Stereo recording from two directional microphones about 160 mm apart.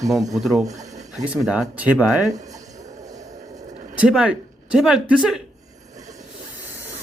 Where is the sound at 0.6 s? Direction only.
20° right (ahead or behind).